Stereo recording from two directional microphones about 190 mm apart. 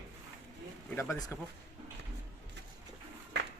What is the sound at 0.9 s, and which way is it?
Speech, 15° left (ahead or behind).